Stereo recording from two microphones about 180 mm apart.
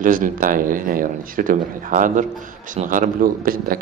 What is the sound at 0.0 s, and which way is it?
Speech, 50° right (ahead or behind).